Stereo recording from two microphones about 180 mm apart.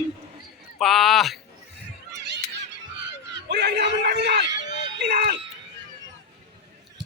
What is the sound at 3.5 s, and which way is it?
Speech, 65° right (ahead or behind).